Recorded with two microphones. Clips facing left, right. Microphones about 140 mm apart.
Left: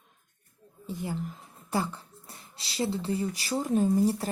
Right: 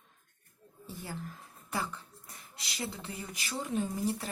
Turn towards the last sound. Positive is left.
turn(degrees=40)  # may be behind; listen again after turning